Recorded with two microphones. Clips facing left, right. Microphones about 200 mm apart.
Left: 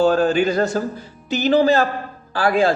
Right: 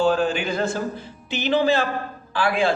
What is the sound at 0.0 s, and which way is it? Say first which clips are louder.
A man's voice: left 5 dB; 40° left (ahead or behind).